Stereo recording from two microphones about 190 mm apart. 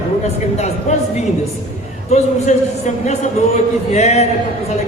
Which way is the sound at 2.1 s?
35° left (ahead or behind).